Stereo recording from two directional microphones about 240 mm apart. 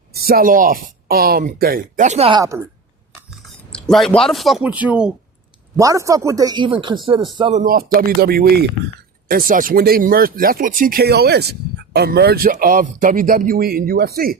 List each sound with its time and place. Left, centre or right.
0.1 s speech: right; by 2.6 s centre
3.7 s speech: centre; by 7.6 s right
7.6 s speech: right